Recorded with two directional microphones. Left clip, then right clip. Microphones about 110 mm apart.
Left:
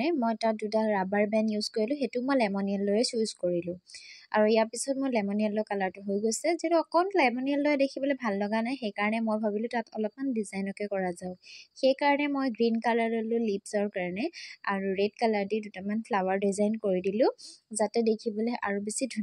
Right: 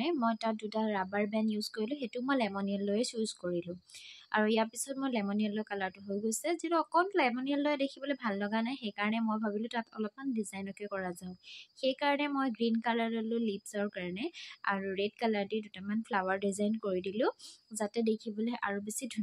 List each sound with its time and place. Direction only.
0.0 s speech: 30° left (ahead or behind)